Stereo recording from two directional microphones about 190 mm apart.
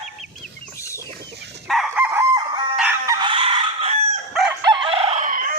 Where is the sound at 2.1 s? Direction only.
15° right (ahead or behind).